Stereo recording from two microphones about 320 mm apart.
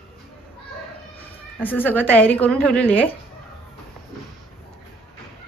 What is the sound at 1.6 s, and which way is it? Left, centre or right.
Speech, centre.